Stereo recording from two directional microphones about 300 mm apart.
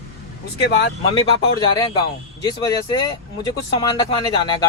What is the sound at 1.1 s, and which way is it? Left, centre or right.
Speech, centre.